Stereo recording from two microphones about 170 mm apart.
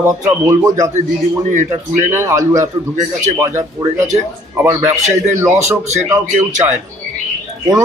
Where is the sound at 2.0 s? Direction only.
15° right (ahead or behind).